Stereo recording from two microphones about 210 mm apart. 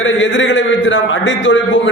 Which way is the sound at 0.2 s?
60° left (ahead or behind).